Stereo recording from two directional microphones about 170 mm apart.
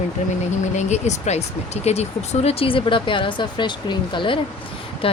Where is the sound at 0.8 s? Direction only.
40° left (ahead or behind).